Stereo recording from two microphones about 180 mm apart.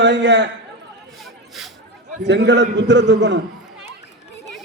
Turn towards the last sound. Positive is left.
turn(degrees=-75)  # may be behind; listen again after turning